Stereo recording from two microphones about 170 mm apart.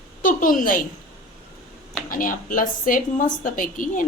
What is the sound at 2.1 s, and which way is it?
Speech, 55° left (ahead or behind).